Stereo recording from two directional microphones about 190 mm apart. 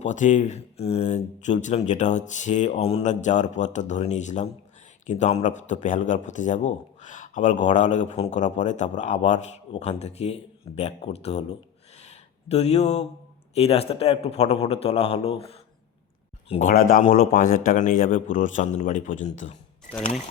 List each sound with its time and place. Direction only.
0.0 s a man's voice: 40° left (ahead or behind)
11.9 s a sound: 35° left (ahead or behind)
13.5 s a man's voice: 30° left (ahead or behind)